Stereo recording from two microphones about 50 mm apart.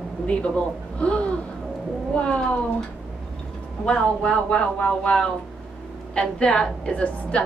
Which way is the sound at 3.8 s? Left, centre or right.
Left.